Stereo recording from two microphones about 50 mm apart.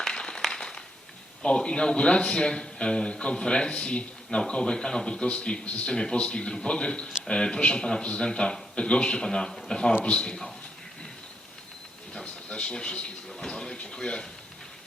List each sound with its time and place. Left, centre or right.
0.0 s a sound: centre
1.4 s a man's voice: centre
5.9 s a man's voice: centre
12.2 s speech: left